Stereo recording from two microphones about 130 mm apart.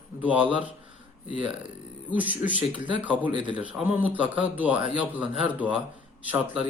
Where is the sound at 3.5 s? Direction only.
10° right (ahead or behind).